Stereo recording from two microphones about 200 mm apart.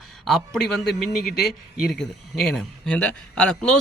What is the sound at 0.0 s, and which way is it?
A man's voice, centre (ahead or behind).